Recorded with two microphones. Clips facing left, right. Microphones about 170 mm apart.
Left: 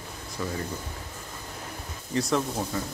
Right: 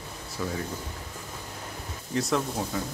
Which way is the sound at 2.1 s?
Centre (ahead or behind).